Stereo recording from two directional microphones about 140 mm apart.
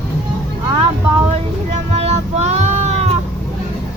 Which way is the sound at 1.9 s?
50° right (ahead or behind).